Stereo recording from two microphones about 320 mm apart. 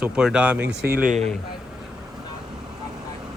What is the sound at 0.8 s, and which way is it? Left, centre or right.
Speech, right.